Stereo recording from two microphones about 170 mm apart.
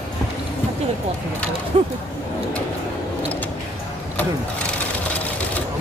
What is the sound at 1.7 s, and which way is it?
Speech, 35° right (ahead or behind).